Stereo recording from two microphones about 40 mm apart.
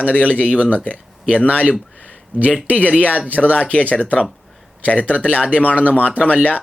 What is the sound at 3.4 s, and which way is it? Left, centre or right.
Speech, left.